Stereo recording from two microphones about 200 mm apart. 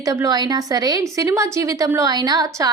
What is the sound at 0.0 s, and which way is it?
A woman's voice, 15° right (ahead or behind).